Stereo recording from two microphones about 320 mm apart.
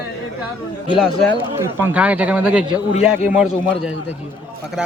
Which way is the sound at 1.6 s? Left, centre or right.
Centre.